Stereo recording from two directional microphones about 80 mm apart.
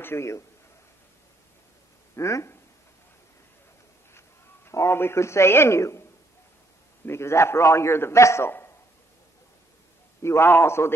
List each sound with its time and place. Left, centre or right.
0.0 s a man's voice: left
2.1 s a man's voice: left
4.6 s a man's voice: left
7.1 s a man's voice: left
10.2 s a man's voice: left